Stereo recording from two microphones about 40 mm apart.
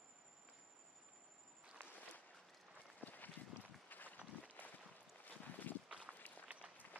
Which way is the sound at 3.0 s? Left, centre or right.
Left.